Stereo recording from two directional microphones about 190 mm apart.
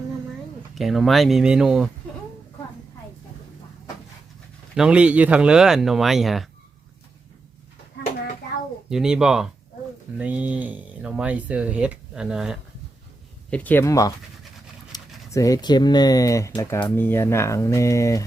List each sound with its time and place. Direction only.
0.8 s speech: centre (ahead or behind)
4.7 s speech: 5° right (ahead or behind)
8.9 s speech: 5° right (ahead or behind)
13.5 s speech: 10° left (ahead or behind)